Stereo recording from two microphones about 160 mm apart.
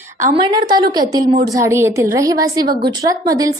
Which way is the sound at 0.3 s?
25° right (ahead or behind).